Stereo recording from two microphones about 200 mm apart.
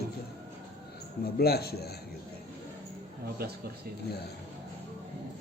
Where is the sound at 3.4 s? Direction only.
50° right (ahead or behind).